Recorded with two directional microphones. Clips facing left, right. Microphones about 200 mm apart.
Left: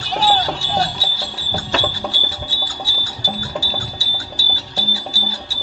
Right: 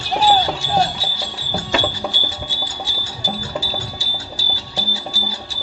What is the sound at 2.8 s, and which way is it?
Music, 20° right (ahead or behind).